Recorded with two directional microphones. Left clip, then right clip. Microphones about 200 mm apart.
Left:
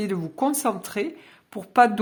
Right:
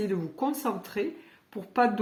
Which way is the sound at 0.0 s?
35° left (ahead or behind).